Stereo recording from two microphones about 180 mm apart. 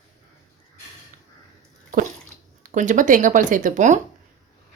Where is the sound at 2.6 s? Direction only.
45° right (ahead or behind).